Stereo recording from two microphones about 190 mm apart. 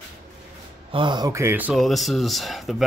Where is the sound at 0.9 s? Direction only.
25° right (ahead or behind); by 2.8 s centre (ahead or behind).